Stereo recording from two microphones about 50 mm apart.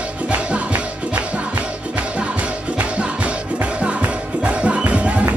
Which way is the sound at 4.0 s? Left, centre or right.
Right.